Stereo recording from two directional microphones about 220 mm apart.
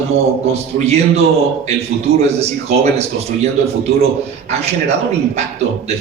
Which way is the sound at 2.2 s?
30° right (ahead or behind).